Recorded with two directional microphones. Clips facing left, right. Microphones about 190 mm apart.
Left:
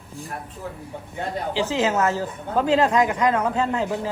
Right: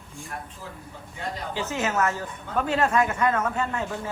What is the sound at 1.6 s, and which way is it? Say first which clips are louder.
A man's voice: left 4 dB; 15° left (ahead or behind).